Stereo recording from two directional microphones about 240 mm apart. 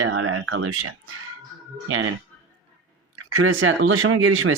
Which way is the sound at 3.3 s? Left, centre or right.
Right.